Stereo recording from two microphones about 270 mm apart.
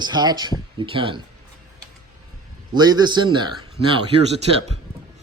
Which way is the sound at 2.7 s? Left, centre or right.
Centre.